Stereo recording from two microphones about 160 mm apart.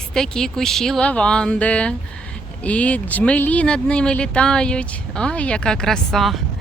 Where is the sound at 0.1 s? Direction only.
5° left (ahead or behind).